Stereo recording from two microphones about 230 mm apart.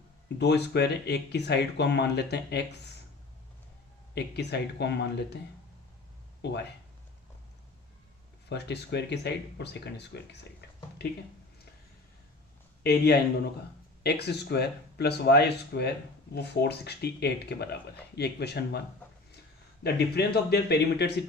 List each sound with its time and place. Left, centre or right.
0.3 s speech: left
4.1 s speech: left
6.4 s speech: left
8.4 s speech: left
12.8 s speech: left
19.8 s speech: left